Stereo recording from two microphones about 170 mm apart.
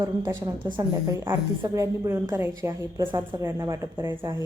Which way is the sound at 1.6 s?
20° right (ahead or behind).